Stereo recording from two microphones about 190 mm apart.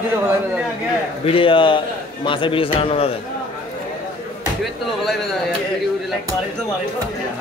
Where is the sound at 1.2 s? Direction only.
30° left (ahead or behind).